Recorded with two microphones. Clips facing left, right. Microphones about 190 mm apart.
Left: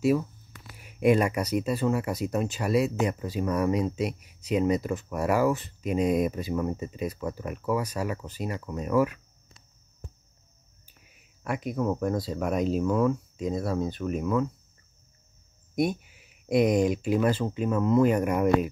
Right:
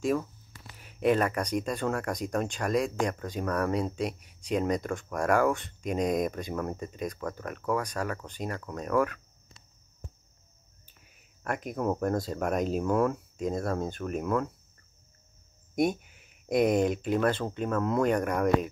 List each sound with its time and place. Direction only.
0.7 s speech: 10° left (ahead or behind)
11.4 s speech: 5° left (ahead or behind)
16.4 s speech: 5° left (ahead or behind)